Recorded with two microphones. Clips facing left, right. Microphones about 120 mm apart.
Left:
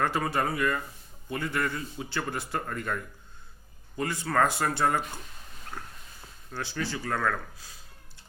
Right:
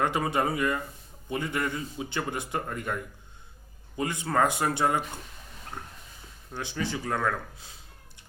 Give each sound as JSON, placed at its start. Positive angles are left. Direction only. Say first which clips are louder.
{"t": 0.0, "sound": "a man's voice", "louder": "right 1 dB", "side_deg": -20}
{"t": 6.5, "sound": "speech", "louder": "right 1 dB", "side_deg": -15}